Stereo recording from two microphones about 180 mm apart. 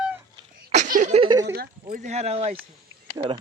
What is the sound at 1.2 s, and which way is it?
Speech, 20° right (ahead or behind).